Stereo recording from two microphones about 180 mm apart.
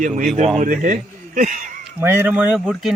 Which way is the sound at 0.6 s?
45° right (ahead or behind).